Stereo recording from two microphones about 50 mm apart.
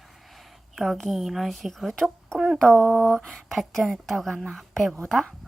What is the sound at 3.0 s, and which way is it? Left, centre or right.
A woman's voice, centre.